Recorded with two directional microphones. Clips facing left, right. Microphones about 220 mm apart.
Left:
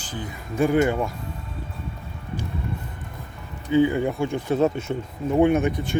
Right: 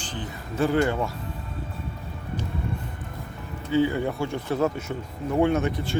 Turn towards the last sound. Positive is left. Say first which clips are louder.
# left 3 dB
turn(degrees=15)  # may be behind; listen again after turning